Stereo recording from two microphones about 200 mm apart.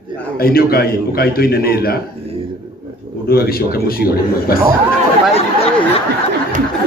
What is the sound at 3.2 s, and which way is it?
A man's voice, 50° left (ahead or behind).